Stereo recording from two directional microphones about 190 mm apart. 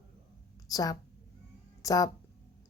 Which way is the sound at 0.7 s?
20° left (ahead or behind).